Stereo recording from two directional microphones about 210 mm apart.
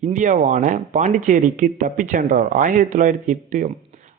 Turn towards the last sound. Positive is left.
turn(degrees=-40)  # may be behind; listen again after turning